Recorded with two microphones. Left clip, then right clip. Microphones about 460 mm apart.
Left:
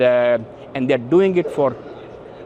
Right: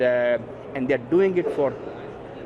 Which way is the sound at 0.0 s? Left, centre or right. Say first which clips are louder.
Left 6 dB; left.